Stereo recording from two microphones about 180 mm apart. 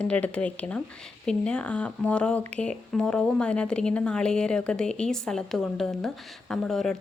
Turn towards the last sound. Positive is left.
turn(degrees=0)  # may be behind; listen again after turning